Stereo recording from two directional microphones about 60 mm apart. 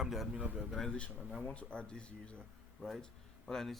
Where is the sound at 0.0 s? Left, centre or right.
Centre.